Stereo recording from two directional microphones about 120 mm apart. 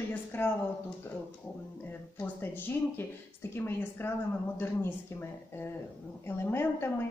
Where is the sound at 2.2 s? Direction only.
15° left (ahead or behind).